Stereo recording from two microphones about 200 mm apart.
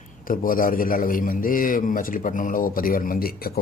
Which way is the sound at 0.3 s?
45° left (ahead or behind).